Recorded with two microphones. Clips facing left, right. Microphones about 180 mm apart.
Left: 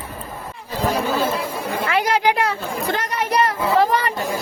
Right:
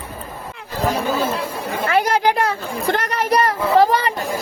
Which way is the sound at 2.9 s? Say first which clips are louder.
Right 4 dB; 60° right (ahead or behind).